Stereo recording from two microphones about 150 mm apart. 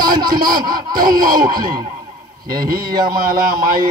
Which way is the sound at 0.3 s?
70° right (ahead or behind).